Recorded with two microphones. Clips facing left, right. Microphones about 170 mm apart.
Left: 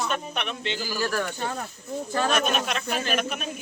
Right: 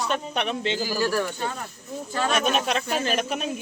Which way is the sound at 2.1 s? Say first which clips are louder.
Even; 5° left (ahead or behind).